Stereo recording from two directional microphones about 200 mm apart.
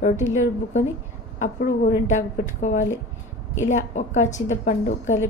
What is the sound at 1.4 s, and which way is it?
A woman's voice, 40° left (ahead or behind).